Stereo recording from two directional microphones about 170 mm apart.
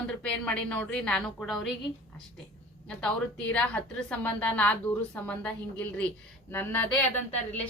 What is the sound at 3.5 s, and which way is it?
A woman's voice, 10° left (ahead or behind).